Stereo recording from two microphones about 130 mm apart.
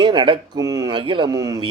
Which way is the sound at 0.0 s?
35° right (ahead or behind).